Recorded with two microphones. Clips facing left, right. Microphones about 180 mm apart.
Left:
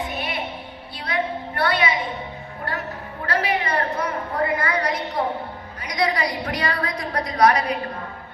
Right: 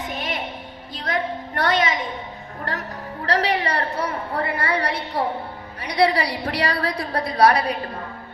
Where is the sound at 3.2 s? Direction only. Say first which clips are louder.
Right 2 dB; 35° right (ahead or behind).